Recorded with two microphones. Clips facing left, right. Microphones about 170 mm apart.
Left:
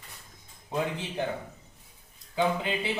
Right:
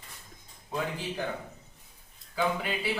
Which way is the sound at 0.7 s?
20° left (ahead or behind).